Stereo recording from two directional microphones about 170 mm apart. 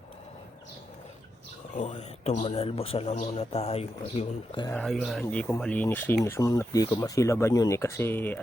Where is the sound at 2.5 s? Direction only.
35° left (ahead or behind).